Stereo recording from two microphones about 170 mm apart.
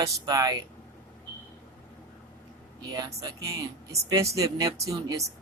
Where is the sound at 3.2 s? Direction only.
20° right (ahead or behind).